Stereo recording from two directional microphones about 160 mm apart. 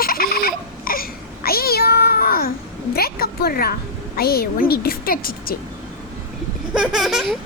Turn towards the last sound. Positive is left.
turn(degrees=0)  # may be behind; listen again after turning